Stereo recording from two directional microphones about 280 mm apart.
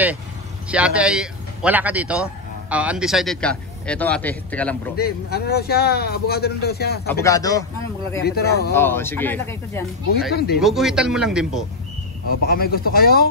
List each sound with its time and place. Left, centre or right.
0.7 s a man's voice: centre
4.9 s speech: left
7.1 s speech: centre
8.2 s speech: left
8.7 s speech: centre
10.3 s speech: left
10.6 s a man's voice: centre
12.4 s speech: left